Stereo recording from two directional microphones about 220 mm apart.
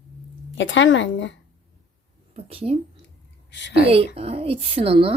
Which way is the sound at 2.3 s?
25° right (ahead or behind).